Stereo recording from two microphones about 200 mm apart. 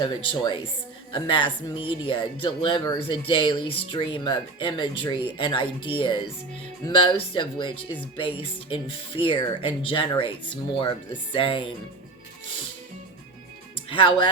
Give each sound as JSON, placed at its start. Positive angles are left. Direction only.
{"t": 0.0, "sound": "speech", "side_deg": 25}
{"t": 13.9, "sound": "speech", "side_deg": 25}